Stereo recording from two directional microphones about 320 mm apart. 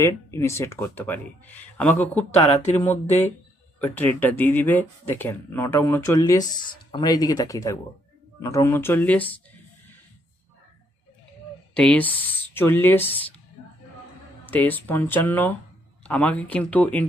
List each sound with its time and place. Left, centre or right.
0.0 s speech: centre
11.7 s speech: centre
14.5 s speech: centre